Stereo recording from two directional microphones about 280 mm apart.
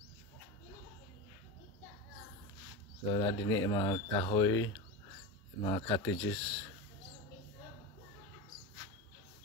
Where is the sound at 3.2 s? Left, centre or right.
Centre.